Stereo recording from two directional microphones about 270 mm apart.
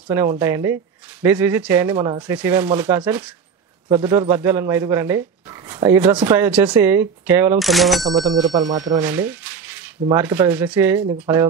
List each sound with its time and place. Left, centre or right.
0.1 s speech: centre
8.3 s speech: centre